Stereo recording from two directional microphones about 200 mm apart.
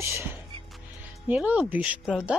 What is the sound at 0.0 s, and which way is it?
Speech, 15° right (ahead or behind).